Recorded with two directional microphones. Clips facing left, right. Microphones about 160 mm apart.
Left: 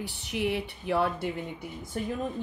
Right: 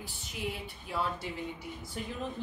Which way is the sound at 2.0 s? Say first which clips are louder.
Left 8 dB; 50° left (ahead or behind).